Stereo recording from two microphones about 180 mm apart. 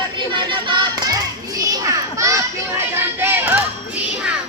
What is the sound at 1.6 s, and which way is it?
Children playing, 20° right (ahead or behind).